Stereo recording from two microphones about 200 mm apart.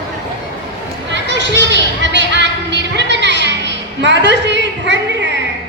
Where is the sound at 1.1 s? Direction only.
60° right (ahead or behind).